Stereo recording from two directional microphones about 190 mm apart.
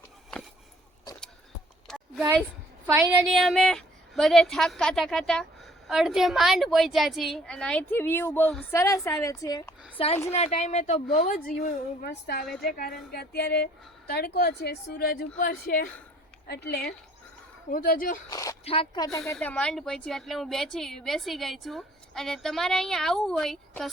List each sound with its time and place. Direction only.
1.9 s a sound: 5° left (ahead or behind)
2.8 s a woman's voice: 15° right (ahead or behind)
3.2 s a woman's voice: centre (ahead or behind); by 9.6 s 15° left (ahead or behind)
10.0 s a woman's voice: 30° left (ahead or behind); by 15.9 s 50° left (ahead or behind)
17.7 s speech: 45° left (ahead or behind)
18.3 s speech: 20° left (ahead or behind)
18.6 s speech: 30° left (ahead or behind)
19.3 s a woman's voice: 10° left (ahead or behind)